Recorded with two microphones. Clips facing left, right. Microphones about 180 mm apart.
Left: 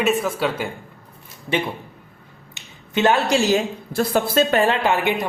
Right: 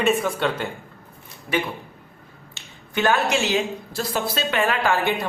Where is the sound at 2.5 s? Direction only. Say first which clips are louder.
Left 4 dB; 25° left (ahead or behind); by 4.6 s 45° left (ahead or behind).